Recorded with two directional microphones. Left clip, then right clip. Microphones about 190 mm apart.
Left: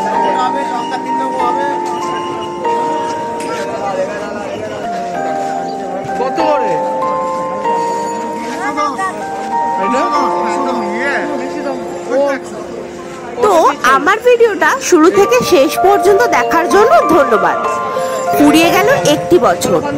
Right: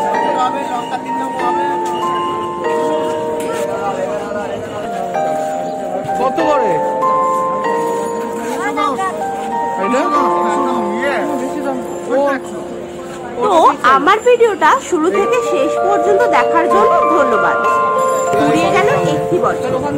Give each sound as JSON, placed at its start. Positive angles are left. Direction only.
{"t": 13.5, "sound": "a woman's voice", "side_deg": 25}
{"t": 18.6, "sound": "music", "side_deg": 35}